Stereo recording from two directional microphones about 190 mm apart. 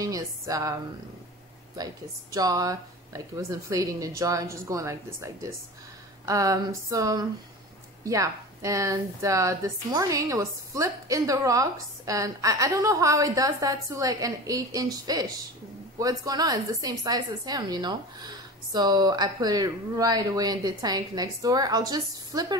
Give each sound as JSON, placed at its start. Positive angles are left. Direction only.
{"t": 0.0, "sound": "a woman's voice", "side_deg": -20}
{"t": 2.3, "sound": "a woman's voice", "side_deg": -20}